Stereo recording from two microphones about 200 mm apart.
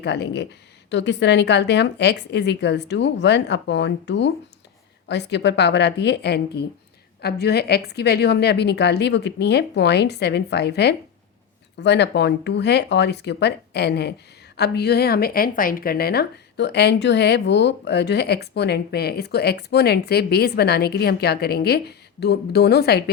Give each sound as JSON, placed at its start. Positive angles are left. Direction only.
{"t": 0.0, "sound": "a woman's voice", "side_deg": 60}